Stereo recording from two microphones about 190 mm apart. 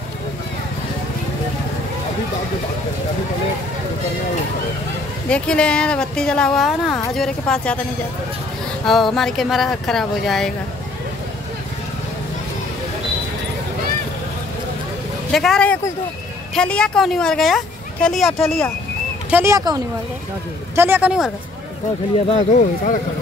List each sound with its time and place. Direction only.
5.3 s speech: 5° left (ahead or behind)
8.8 s speech: centre (ahead or behind)
15.3 s speech: centre (ahead or behind)
19.3 s speech: 15° right (ahead or behind)
22.3 s speech: 40° left (ahead or behind)